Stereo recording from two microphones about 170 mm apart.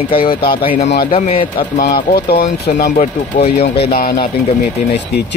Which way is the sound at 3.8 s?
60° left (ahead or behind).